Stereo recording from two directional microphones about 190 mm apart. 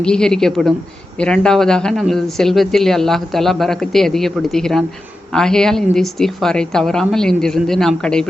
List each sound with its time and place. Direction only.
0.0 s speech: 5° left (ahead or behind)